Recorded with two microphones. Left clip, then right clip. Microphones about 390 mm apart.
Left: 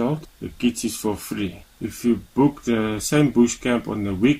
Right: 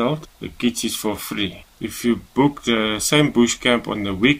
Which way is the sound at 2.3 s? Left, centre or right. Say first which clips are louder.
Right 3 dB; right.